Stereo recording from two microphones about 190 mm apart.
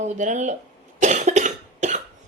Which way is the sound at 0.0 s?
40° right (ahead or behind).